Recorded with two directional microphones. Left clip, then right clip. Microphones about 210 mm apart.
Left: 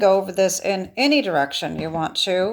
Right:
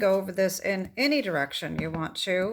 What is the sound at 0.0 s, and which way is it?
Speech, 20° right (ahead or behind).